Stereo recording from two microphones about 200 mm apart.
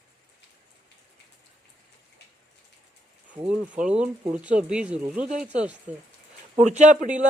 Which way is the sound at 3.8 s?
5° right (ahead or behind).